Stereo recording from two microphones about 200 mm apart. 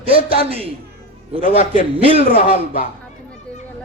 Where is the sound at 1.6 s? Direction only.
40° left (ahead or behind).